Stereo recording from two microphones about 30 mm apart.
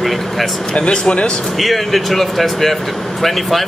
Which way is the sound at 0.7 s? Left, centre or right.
Left.